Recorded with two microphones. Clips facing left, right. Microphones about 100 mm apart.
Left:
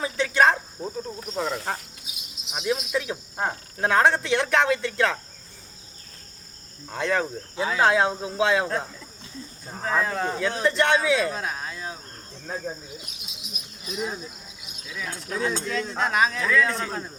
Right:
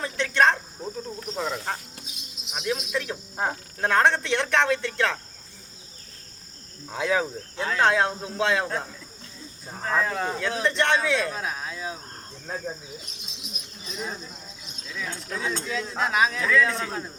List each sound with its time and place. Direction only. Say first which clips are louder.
0.0 s speech: left 1 dB; 5° left (ahead or behind)
6.8 s speech: even; 5° right (ahead or behind)